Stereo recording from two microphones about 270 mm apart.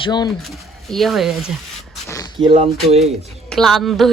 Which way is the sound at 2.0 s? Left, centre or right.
Centre.